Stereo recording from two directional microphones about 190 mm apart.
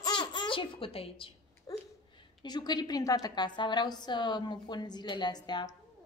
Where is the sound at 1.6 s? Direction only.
25° left (ahead or behind).